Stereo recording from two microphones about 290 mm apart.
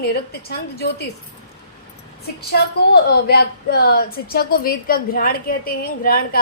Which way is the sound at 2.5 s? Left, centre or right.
Left.